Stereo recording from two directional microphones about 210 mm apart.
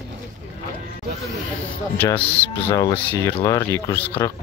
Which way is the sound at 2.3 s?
25° left (ahead or behind).